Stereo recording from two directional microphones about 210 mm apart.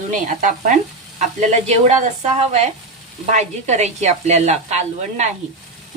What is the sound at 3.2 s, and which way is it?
Speech, 35° right (ahead or behind).